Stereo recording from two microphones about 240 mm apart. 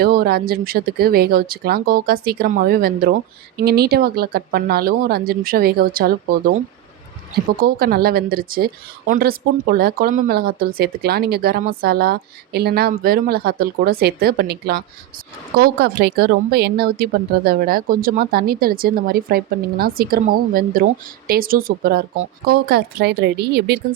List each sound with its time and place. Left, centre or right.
0.0 s speech: right
7.6 s speech: right